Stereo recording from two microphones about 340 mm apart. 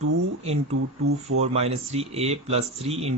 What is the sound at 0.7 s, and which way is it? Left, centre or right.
Speech, right.